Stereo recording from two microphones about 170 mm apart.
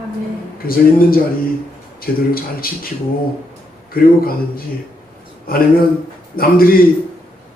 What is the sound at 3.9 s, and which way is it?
Speech, 60° left (ahead or behind).